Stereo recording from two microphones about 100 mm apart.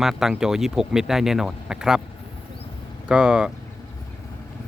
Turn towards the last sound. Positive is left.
turn(degrees=-5)  # may be behind; listen again after turning